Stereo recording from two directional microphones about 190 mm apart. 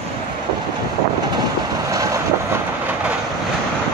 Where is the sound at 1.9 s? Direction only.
15° right (ahead or behind).